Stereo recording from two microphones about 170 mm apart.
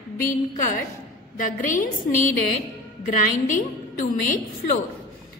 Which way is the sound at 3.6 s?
50° left (ahead or behind).